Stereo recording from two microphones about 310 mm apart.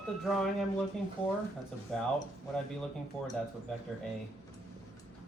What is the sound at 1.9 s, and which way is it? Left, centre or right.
Speech, centre.